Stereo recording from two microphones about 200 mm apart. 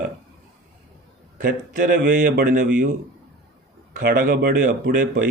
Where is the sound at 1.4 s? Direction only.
40° right (ahead or behind).